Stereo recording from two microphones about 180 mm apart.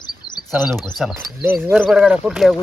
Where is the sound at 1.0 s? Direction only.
5° right (ahead or behind).